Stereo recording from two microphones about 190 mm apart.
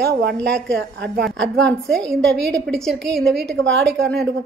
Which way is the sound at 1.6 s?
Centre (ahead or behind).